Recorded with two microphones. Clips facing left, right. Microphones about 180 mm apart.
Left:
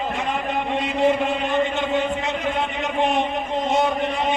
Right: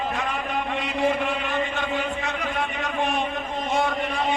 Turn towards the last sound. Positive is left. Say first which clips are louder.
# left 3 dB
turn(degrees=20)  # may be behind; listen again after turning